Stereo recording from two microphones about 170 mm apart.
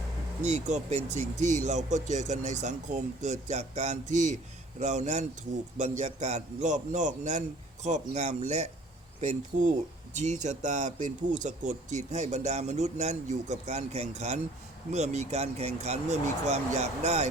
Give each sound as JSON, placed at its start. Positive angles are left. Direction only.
{"t": 0.4, "sound": "speech", "side_deg": -45}